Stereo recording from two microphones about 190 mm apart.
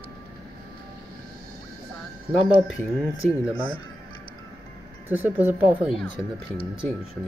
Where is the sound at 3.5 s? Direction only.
25° left (ahead or behind).